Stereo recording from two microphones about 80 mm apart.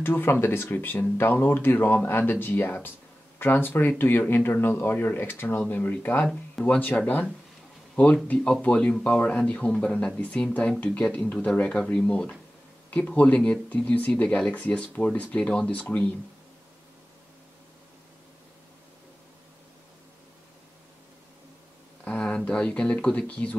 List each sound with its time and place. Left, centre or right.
0.0 s speech: left
22.0 s speech: centre